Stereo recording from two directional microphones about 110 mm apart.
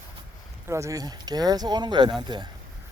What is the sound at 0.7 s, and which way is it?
Speech, 30° right (ahead or behind).